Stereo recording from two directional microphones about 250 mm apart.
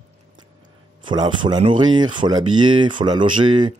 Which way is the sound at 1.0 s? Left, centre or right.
Centre.